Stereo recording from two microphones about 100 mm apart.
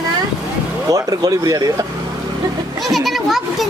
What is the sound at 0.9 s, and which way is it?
Speech, 35° right (ahead or behind).